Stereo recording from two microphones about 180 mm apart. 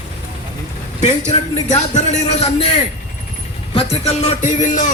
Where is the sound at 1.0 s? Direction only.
40° left (ahead or behind).